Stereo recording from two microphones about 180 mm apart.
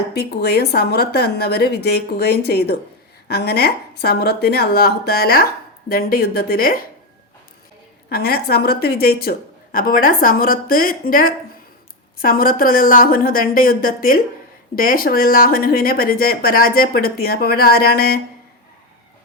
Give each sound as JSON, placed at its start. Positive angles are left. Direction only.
{"t": 0.1, "sound": "speech", "side_deg": 65}
{"t": 8.1, "sound": "speech", "side_deg": 60}